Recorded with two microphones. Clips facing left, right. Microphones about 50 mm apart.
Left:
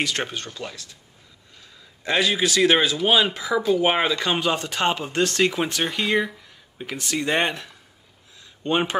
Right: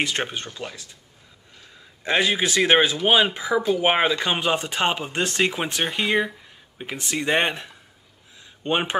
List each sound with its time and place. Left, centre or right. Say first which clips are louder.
0.0 s speech: right 1 dB; right
2.0 s speech: even; right
8.4 s a sound: left 1 dB; right